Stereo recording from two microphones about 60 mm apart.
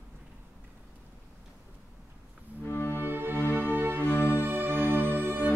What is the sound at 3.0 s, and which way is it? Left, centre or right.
Music, right.